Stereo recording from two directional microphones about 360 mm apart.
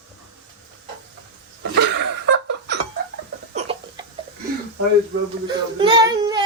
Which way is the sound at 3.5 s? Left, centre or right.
Centre.